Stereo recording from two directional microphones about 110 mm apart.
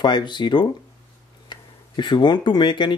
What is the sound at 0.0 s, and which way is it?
Speech, 40° left (ahead or behind).